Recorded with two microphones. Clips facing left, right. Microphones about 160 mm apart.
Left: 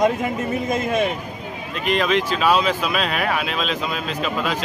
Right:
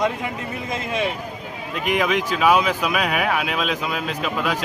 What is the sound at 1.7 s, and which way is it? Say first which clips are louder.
Speech: left 1 dB; 15° right (ahead or behind).